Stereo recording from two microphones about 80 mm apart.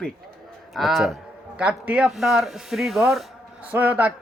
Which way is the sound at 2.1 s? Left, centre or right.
Centre.